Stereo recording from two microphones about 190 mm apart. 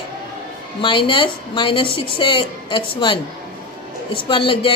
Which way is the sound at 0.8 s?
25° left (ahead or behind).